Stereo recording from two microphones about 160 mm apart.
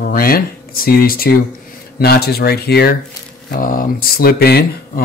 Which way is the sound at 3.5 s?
60° left (ahead or behind).